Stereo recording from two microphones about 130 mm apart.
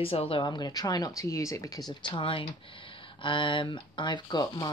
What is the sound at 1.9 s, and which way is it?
Speech, 35° left (ahead or behind).